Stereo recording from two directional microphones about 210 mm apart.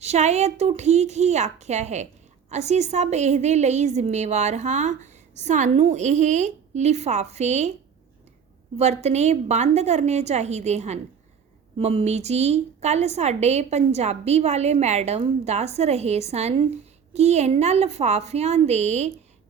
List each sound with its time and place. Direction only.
0.0 s a woman's voice: 30° right (ahead or behind)
8.8 s a woman's voice: 30° right (ahead or behind)